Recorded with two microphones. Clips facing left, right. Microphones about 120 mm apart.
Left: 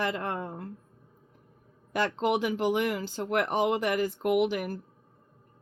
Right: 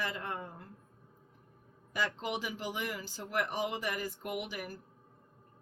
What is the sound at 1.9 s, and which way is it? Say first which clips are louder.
Speech: left 9 dB; 65° left (ahead or behind).